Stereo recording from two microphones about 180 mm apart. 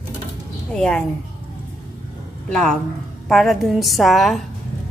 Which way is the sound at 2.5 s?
5° left (ahead or behind).